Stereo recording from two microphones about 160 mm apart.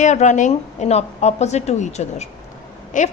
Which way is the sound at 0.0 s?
50° left (ahead or behind).